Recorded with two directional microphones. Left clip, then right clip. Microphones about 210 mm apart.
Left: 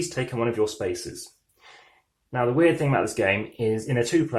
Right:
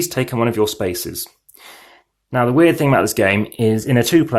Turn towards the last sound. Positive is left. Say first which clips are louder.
# right 8 dB
turn(degrees=-50)  # may be behind; listen again after turning